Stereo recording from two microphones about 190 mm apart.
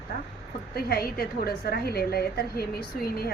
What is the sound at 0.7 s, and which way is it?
A woman's voice, 55° left (ahead or behind).